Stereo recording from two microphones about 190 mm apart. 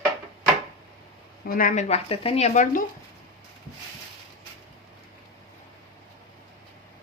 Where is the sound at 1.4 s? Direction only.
50° left (ahead or behind).